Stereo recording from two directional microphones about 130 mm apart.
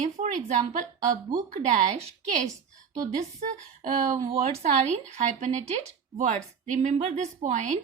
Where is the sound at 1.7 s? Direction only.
75° right (ahead or behind).